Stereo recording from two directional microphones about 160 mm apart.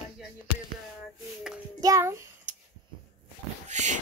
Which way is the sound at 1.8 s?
20° right (ahead or behind).